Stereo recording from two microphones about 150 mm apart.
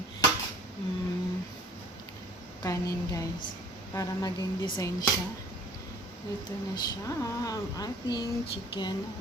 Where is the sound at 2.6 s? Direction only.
20° left (ahead or behind).